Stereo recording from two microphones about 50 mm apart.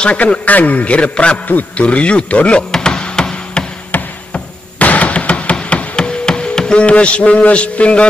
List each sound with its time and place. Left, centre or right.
0.0 s a man's voice: left
2.7 s music: centre
3.9 s a sound: left